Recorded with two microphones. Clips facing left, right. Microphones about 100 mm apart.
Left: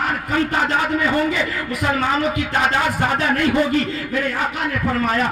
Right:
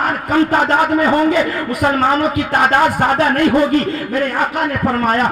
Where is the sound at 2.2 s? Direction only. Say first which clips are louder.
Right 5 dB; 50° right (ahead or behind).